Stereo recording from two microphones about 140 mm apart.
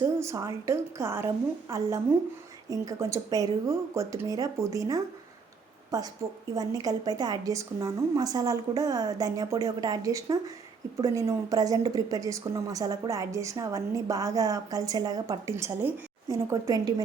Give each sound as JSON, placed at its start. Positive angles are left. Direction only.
{"t": 0.2, "sound": "speech", "side_deg": -20}